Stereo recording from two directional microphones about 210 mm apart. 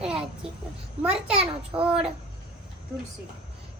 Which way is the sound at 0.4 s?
5° right (ahead or behind).